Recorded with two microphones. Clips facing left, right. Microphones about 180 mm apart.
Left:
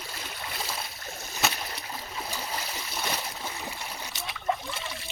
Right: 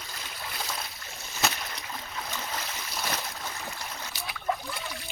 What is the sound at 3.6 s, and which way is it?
Boat, 10° left (ahead or behind).